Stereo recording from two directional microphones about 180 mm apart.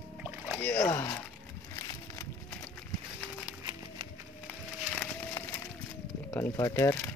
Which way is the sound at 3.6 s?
20° right (ahead or behind).